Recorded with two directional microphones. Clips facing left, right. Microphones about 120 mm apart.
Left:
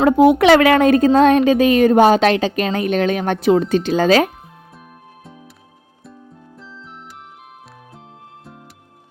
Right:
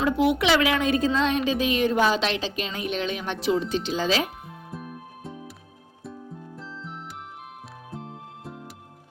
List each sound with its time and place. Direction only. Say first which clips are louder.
0.1 s a woman's voice: left 11 dB; 50° left (ahead or behind)
4.7 s music: right 4 dB; centre (ahead or behind)